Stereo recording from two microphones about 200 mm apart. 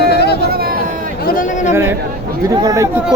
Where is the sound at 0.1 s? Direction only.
55° left (ahead or behind).